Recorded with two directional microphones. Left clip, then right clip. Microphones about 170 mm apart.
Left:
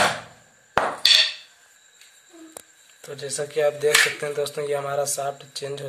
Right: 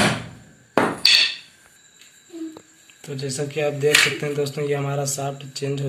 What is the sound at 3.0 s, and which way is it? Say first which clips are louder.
Speech: right 2 dB; 60° left (ahead or behind).